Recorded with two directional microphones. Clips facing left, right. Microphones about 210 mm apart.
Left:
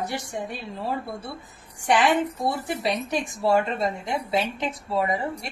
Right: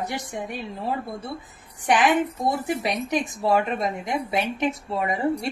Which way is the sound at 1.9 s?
15° right (ahead or behind).